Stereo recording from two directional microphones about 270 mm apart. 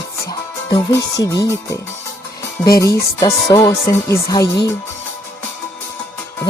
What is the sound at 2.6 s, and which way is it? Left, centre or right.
Music, centre.